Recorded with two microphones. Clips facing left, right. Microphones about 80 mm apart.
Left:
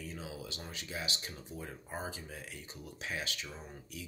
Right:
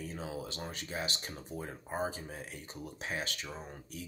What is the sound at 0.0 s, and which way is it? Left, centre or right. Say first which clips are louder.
Speech: right 4 dB; right.